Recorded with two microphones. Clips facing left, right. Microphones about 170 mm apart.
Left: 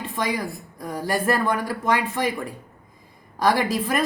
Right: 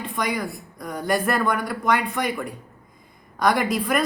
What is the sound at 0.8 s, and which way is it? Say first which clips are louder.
Speech: right 1 dB; 30° left (ahead or behind).